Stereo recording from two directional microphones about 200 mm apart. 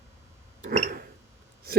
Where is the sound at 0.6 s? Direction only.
40° right (ahead or behind).